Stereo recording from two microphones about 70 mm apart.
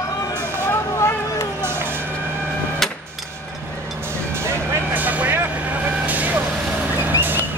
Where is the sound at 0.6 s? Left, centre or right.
Left.